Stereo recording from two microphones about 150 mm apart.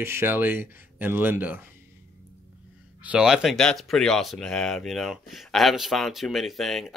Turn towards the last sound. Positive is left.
turn(degrees=0)  # may be behind; listen again after turning